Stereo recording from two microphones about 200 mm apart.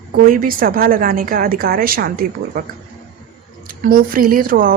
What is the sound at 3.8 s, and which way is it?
Speech, 45° right (ahead or behind).